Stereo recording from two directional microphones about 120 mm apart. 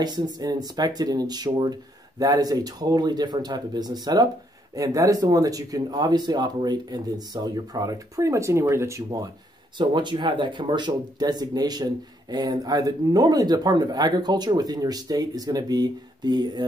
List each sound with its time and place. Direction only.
0.0 s speech: 35° right (ahead or behind)
9.8 s speech: 40° right (ahead or behind)